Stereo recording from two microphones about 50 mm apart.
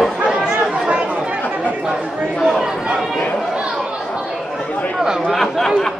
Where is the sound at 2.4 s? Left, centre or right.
Centre.